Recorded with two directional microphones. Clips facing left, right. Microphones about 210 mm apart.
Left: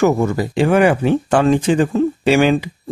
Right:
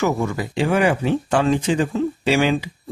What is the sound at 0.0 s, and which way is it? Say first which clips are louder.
Speech: left 6 dB; 45° left (ahead or behind).